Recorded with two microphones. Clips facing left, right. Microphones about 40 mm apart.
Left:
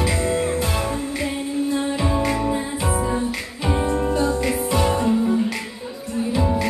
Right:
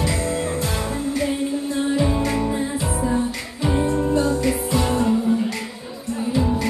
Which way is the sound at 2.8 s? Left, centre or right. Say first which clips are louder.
Even; left.